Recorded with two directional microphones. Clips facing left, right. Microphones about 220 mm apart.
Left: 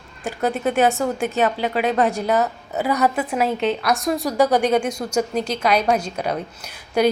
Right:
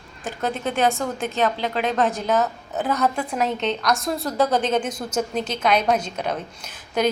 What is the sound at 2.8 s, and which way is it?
A woman's voice, 10° left (ahead or behind).